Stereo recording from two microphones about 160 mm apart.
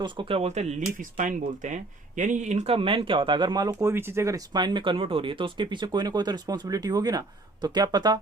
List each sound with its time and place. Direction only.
0.0 s speech: 30° right (ahead or behind)